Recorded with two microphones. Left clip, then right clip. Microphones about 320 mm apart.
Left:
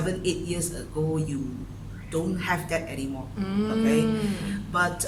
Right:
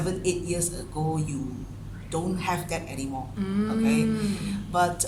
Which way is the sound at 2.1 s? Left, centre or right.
Centre.